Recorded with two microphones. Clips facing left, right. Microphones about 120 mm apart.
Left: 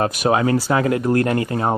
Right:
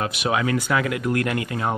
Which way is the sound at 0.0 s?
40° left (ahead or behind).